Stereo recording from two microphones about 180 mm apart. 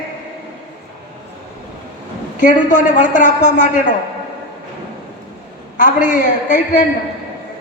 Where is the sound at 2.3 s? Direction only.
45° left (ahead or behind).